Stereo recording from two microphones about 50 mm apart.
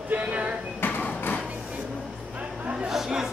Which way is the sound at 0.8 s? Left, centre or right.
Left.